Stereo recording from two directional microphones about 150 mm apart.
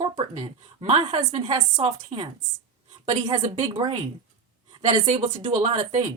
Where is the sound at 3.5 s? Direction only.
45° right (ahead or behind).